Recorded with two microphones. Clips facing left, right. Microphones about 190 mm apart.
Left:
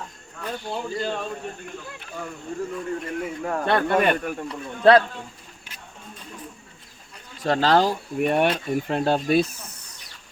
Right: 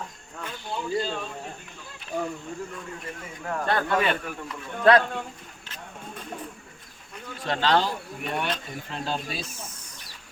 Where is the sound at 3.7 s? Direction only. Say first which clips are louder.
Left 4 dB; 55° left (ahead or behind).